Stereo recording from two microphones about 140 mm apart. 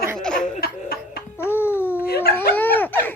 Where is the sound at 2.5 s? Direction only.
15° left (ahead or behind).